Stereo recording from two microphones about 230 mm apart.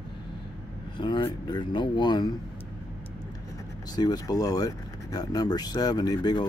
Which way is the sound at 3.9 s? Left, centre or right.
Centre.